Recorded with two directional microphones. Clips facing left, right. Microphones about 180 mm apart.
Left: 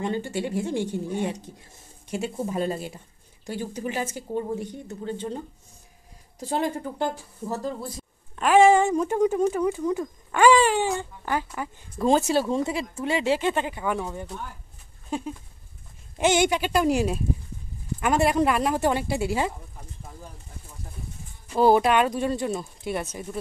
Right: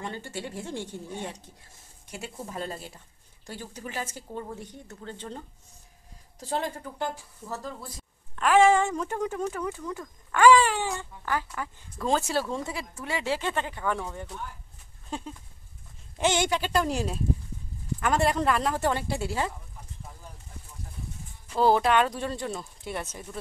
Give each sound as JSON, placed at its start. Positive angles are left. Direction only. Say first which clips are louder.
{"t": 0.0, "sound": "speech", "louder": "left 8 dB", "side_deg": 20}
{"t": 6.8, "sound": "speech", "louder": "left 5 dB", "side_deg": 30}
{"t": 8.4, "sound": "speech", "louder": "left 3 dB", "side_deg": 15}
{"t": 15.0, "sound": "a sound", "louder": "left 6 dB", "side_deg": 10}
{"t": 16.2, "sound": "speech", "louder": "left 4 dB", "side_deg": 15}
{"t": 21.5, "sound": "speech", "louder": "left 3 dB", "side_deg": 15}